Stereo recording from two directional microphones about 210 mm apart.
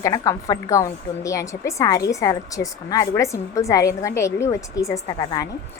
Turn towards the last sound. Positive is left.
turn(degrees=20)  # may be behind; listen again after turning